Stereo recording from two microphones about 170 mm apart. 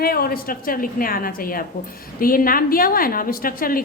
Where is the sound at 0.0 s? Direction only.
60° left (ahead or behind).